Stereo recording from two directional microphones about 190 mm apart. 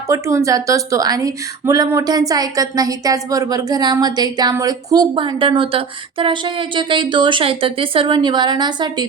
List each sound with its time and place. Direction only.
0.1 s speech: 15° right (ahead or behind)